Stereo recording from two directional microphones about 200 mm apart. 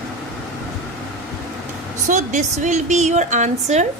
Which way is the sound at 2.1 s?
35° right (ahead or behind).